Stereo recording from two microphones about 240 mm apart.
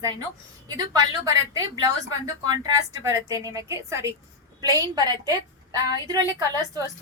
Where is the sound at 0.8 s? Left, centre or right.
Centre.